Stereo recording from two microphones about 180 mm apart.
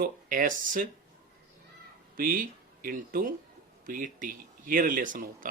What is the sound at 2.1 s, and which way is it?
Speech, 50° right (ahead or behind).